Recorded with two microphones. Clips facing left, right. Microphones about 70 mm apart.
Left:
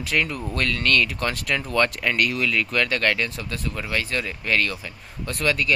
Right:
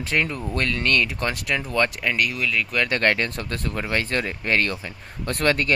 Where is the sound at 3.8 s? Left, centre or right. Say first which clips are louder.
Right 2 dB; right.